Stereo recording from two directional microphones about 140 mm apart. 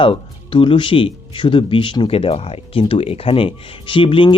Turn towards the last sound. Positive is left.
turn(degrees=35)  # may be behind; listen again after turning